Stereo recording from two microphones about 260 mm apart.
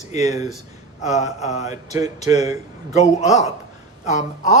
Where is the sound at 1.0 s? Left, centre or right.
Left.